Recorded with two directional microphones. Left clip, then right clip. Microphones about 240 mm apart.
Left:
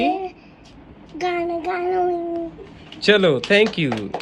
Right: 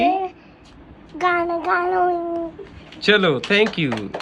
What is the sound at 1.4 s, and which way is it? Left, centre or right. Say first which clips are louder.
Cat: right 3 dB; centre.